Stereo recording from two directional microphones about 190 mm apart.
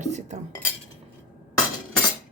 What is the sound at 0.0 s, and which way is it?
Cutlery, 40° right (ahead or behind).